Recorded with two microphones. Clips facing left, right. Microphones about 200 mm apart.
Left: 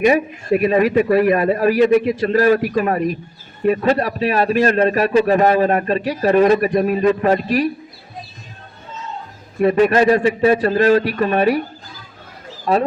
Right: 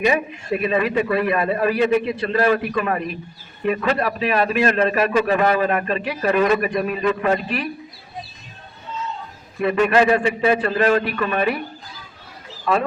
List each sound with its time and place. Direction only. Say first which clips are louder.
0.0 s a man's voice: left 5 dB; 45° left (ahead or behind)
9.6 s a man's voice: left 3 dB; 40° left (ahead or behind)
12.7 s a man's voice: left 3 dB; 40° left (ahead or behind)